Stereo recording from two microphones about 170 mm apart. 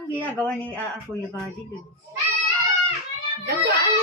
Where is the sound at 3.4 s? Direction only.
70° right (ahead or behind).